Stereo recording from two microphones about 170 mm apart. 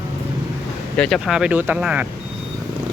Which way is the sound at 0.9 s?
5° left (ahead or behind).